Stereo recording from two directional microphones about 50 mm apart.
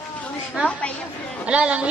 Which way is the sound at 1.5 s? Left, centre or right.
Right.